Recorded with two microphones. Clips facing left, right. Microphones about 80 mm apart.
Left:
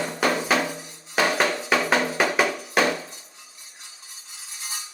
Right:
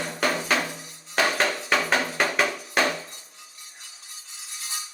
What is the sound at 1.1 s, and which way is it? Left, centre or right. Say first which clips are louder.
Music: left 2 dB; centre.